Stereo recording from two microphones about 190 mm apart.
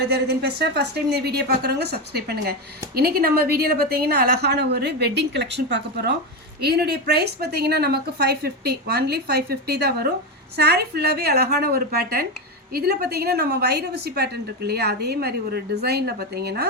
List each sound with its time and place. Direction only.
0.1 s a woman's voice: 60° right (ahead or behind)